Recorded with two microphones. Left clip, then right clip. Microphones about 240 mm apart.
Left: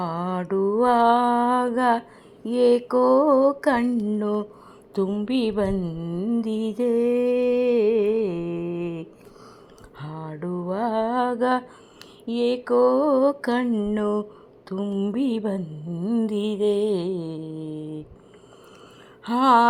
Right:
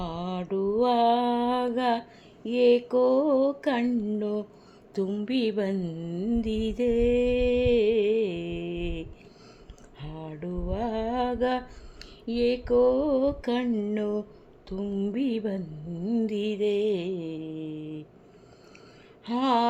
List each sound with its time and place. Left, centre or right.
0.5 s mantra: left
0.8 s mantra: left
1.0 s mantra: centre
2.4 s a sound: centre
2.8 s mantra: centre
8.2 s mantra: left
10.0 s mantra: centre
19.2 s mantra: centre